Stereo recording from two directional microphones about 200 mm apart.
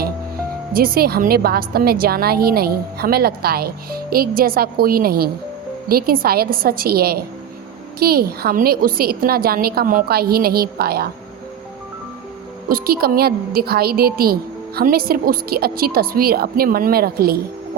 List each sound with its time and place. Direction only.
0.7 s a woman's voice: 45° right (ahead or behind)
12.6 s a woman's voice: 50° right (ahead or behind)